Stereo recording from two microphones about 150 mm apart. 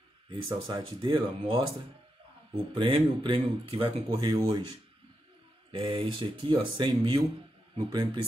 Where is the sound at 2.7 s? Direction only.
35° right (ahead or behind).